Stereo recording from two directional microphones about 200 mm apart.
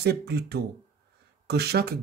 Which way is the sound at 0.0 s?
55° right (ahead or behind).